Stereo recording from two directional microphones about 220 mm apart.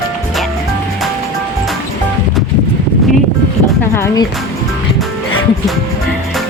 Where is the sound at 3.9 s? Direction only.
10° left (ahead or behind).